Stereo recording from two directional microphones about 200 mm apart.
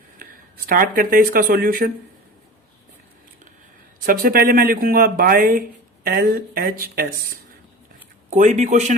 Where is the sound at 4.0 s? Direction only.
45° right (ahead or behind).